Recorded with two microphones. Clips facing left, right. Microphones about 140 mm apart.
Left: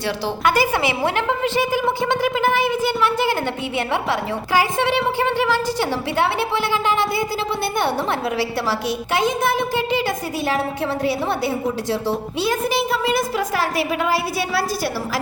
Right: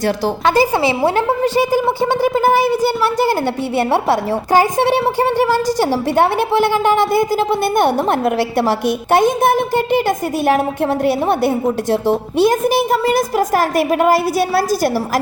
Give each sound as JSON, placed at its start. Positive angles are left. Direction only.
{"t": 0.7, "sound": "a woman's voice", "side_deg": -25}
{"t": 1.1, "sound": "a woman's voice", "side_deg": -40}